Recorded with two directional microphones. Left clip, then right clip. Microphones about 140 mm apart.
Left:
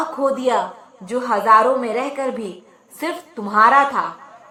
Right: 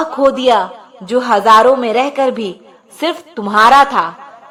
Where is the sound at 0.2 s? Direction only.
25° right (ahead or behind).